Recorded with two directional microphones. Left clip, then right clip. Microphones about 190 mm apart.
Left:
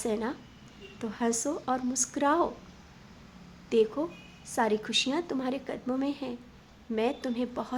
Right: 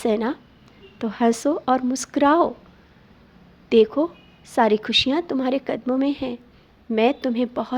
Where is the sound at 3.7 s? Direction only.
35° right (ahead or behind).